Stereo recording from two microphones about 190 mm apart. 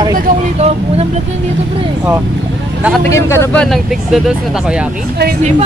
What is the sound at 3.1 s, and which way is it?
Speech, 15° left (ahead or behind).